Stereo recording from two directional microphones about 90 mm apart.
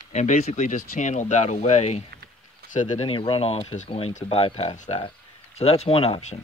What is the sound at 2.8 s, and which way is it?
Speech, 70° left (ahead or behind).